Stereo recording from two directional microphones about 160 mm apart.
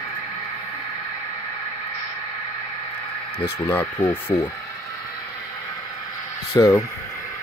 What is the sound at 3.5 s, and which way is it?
Speech, 15° left (ahead or behind).